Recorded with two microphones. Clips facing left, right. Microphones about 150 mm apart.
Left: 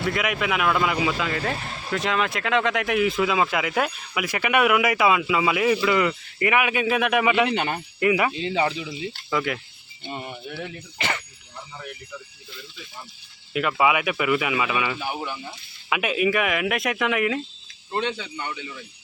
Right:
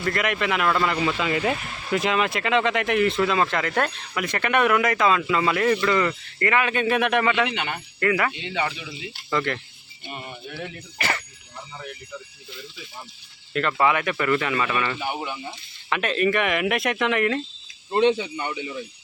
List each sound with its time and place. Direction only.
0.0 s speech: centre (ahead or behind)
1.3 s speech: 10° right (ahead or behind); by 7.5 s 10° left (ahead or behind)
7.5 s speech: 40° left (ahead or behind)
7.9 s speech: 15° left (ahead or behind)
8.4 s speech: 35° left (ahead or behind)
9.3 s speech: 5° left (ahead or behind)
10.1 s speech: 20° left (ahead or behind)
13.5 s speech: 10° left (ahead or behind)
17.9 s speech: 20° right (ahead or behind)